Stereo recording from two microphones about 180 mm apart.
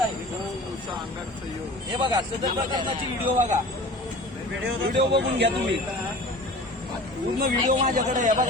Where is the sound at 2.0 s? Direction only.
25° right (ahead or behind).